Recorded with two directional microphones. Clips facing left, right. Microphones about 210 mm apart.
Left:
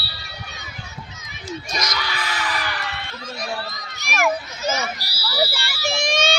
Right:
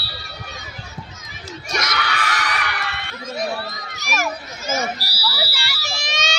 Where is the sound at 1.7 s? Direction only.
70° right (ahead or behind).